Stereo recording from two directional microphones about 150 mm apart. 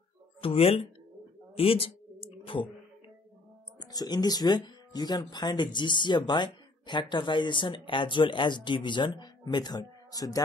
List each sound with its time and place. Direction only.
0.4 s speech: 40° left (ahead or behind)
1.5 s clicking: 40° left (ahead or behind)
3.8 s speech: 25° left (ahead or behind)